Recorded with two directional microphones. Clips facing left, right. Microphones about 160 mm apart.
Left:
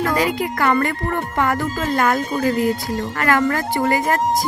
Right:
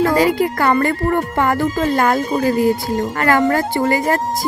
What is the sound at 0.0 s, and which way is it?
A woman's voice, 30° right (ahead or behind).